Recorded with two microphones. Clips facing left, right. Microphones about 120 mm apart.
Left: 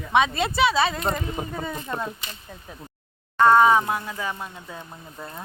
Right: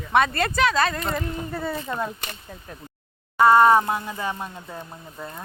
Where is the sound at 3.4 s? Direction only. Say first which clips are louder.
Right 1 dB; 10° right (ahead or behind).